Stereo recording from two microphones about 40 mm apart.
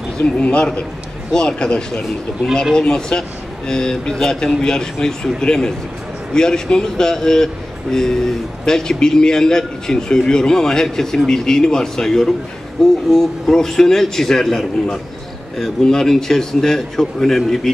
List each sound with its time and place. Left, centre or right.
0.2 s a man's voice: left
1.3 s speech: centre